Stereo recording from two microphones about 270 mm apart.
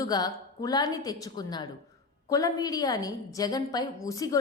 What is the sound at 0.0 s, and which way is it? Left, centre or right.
A woman's voice, centre.